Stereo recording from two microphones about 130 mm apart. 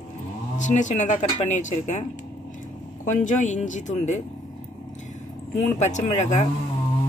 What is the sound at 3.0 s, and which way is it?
Speech, 70° left (ahead or behind).